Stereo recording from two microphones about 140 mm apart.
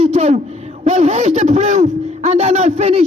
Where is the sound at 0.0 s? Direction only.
50° right (ahead or behind).